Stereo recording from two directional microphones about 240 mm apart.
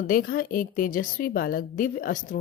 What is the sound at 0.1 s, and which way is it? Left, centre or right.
A woman's voice, left.